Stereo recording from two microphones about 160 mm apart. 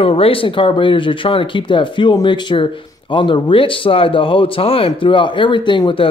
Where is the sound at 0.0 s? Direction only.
35° left (ahead or behind).